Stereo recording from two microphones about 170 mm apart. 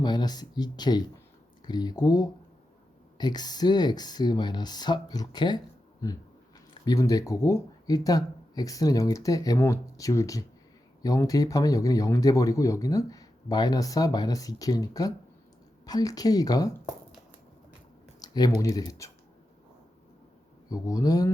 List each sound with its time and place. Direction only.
0.0 s speech: 25° left (ahead or behind)
6.8 s speech: 20° left (ahead or behind)
18.2 s a sound: 20° left (ahead or behind)
18.6 s speech: 20° left (ahead or behind)
20.7 s speech: 20° left (ahead or behind)